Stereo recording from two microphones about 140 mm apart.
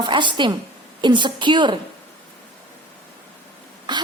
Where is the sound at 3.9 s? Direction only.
35° right (ahead or behind).